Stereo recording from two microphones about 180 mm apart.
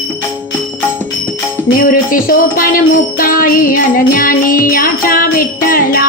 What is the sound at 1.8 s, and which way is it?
Music, 50° left (ahead or behind).